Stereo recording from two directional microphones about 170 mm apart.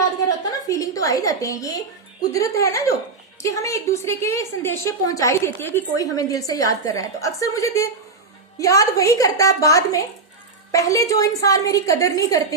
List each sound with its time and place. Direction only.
0.7 s a woman's voice: 20° left (ahead or behind)